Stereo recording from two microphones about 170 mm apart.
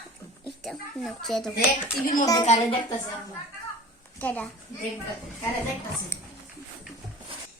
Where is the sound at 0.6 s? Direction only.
Centre (ahead or behind).